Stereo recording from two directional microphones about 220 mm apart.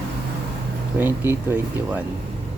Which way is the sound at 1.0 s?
10° right (ahead or behind).